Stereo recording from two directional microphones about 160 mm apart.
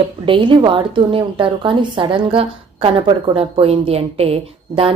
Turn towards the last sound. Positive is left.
turn(degrees=-35)  # may be behind; listen again after turning